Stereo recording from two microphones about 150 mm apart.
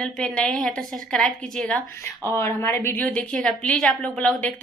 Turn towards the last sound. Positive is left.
turn(degrees=5)  # may be behind; listen again after turning